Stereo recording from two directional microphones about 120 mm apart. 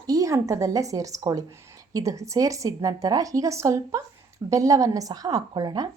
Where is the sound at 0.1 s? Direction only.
25° right (ahead or behind).